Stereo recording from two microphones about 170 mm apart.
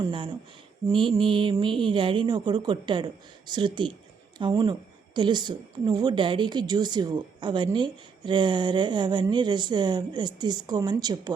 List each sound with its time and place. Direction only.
0.0 s a woman's voice: 30° right (ahead or behind)